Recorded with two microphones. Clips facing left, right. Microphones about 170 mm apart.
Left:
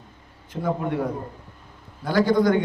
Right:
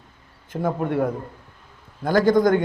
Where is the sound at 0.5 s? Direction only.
50° right (ahead or behind).